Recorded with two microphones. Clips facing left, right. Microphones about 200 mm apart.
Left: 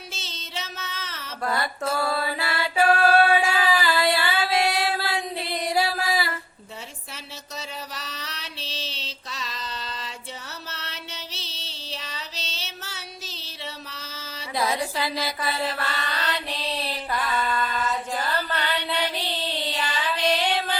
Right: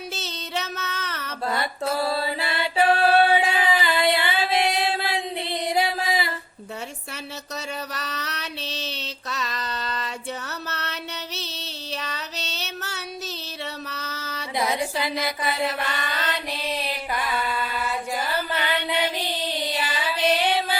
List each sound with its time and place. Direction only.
0.1 s female singing: 65° right (ahead or behind)
1.5 s music: 25° right (ahead or behind)
7.5 s music: 65° right (ahead or behind)
11.5 s female singing: 60° right (ahead or behind)
13.9 s a sound: 65° right (ahead or behind)
14.5 s mantra: 20° right (ahead or behind)
18.9 s child singing: 15° right (ahead or behind)